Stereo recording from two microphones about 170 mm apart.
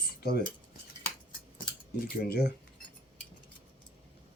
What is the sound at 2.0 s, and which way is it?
Speech, 65° left (ahead or behind).